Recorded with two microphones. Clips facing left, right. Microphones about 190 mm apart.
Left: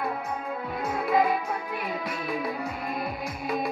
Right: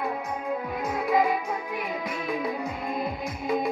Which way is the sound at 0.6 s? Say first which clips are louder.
Right 1 dB; 15° right (ahead or behind).